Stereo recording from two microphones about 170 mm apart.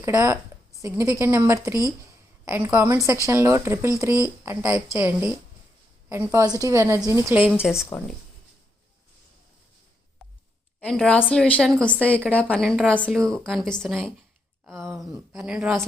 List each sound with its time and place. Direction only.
0.0 s a woman's voice: 20° right (ahead or behind)
10.8 s a woman's voice: 5° left (ahead or behind)